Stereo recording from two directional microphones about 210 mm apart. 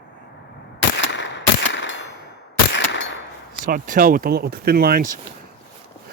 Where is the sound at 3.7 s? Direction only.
40° right (ahead or behind).